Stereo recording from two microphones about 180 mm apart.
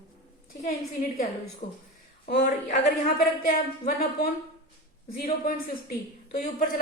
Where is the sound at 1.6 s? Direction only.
50° left (ahead or behind).